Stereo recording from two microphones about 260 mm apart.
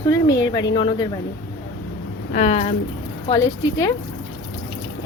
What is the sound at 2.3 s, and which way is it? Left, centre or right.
Speech, left.